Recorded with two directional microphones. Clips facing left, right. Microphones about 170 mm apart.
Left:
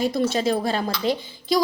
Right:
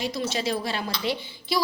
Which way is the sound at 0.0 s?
50° left (ahead or behind).